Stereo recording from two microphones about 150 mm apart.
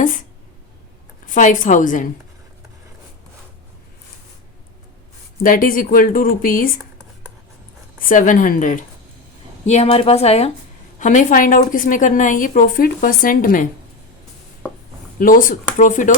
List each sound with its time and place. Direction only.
1.3 s a woman's voice: 60° left (ahead or behind)
5.4 s speech: 70° left (ahead or behind)
7.9 s a woman's voice: 65° left (ahead or behind)
9.6 s a woman's voice: 45° left (ahead or behind)
11.0 s a woman's voice: 55° left (ahead or behind)
15.2 s a woman's voice: 65° left (ahead or behind)